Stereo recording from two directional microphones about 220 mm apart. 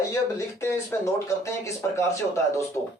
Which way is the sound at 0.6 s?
10° left (ahead or behind).